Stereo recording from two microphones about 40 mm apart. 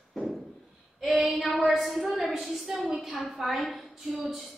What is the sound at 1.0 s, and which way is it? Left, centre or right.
A woman's voice, centre.